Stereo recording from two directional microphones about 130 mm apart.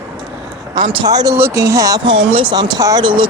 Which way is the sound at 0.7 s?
35° right (ahead or behind).